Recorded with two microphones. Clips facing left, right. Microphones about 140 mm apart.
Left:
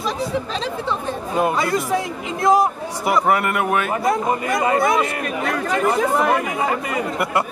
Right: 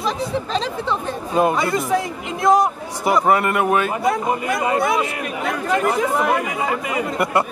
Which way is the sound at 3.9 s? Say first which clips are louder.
Even; centre (ahead or behind).